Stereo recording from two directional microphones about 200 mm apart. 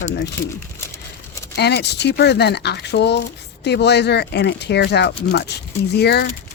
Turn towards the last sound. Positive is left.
turn(degrees=55)  # may be behind; listen again after turning